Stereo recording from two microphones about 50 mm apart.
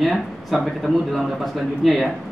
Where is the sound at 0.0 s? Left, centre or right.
Centre.